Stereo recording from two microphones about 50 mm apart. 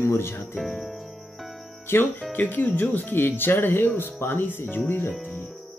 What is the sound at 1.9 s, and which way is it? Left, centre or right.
Speech, left.